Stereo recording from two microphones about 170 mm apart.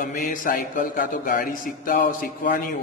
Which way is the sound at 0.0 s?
50° left (ahead or behind).